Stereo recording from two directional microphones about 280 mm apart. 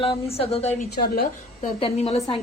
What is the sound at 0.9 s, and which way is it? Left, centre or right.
Speech, left.